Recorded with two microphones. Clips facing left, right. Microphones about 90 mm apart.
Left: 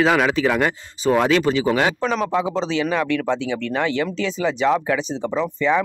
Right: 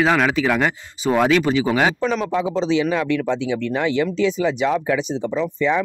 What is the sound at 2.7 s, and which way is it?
Speech, 15° right (ahead or behind).